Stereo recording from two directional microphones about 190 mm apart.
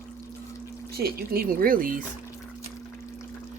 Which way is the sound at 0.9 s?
55° right (ahead or behind).